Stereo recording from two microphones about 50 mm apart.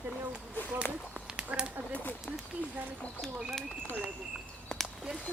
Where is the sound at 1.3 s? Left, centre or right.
Centre.